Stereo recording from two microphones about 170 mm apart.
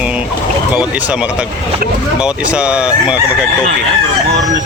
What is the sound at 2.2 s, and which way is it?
Speech, 5° right (ahead or behind).